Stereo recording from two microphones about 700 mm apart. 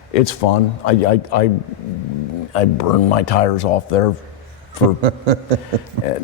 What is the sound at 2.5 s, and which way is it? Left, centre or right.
Speech, left.